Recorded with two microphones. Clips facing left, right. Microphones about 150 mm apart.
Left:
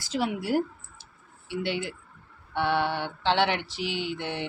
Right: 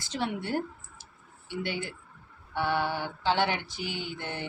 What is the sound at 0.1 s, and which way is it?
Speech, 10° left (ahead or behind).